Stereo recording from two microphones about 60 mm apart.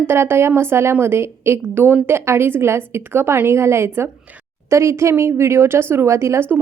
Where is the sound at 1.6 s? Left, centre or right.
Right.